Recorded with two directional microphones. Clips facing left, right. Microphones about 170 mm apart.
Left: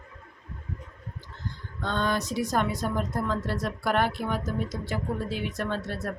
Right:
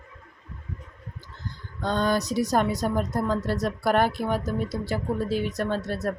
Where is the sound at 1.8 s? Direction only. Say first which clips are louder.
Right 4 dB; 40° right (ahead or behind).